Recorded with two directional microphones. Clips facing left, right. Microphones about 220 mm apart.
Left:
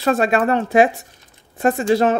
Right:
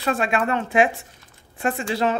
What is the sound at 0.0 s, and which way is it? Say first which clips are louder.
Speech: left 6 dB; 40° left (ahead or behind).